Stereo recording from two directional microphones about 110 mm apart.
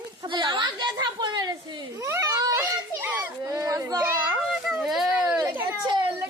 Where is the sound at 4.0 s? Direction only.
15° right (ahead or behind).